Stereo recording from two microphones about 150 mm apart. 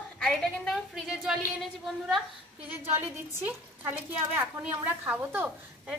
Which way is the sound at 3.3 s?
10° right (ahead or behind).